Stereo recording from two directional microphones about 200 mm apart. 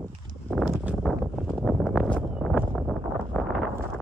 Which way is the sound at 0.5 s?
Centre (ahead or behind).